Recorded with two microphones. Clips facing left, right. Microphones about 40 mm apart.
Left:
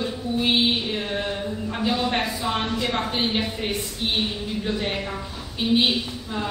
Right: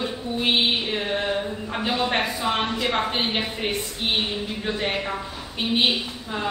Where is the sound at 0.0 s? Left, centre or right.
Centre.